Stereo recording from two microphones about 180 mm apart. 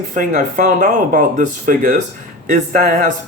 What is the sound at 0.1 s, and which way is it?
Speech, 50° right (ahead or behind).